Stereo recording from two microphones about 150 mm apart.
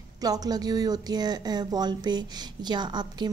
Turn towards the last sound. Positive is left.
turn(degrees=-30)  # may be behind; listen again after turning